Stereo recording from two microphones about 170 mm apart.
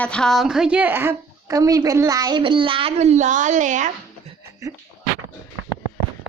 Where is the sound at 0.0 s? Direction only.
5° left (ahead or behind); by 3.9 s 45° right (ahead or behind).